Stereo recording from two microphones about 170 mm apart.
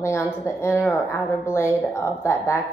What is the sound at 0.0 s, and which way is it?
A woman's voice, 15° left (ahead or behind).